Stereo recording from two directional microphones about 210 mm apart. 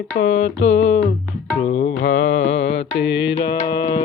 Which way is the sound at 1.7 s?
35° left (ahead or behind).